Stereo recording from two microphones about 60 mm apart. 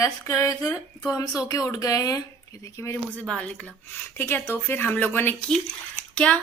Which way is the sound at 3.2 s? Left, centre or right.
Centre.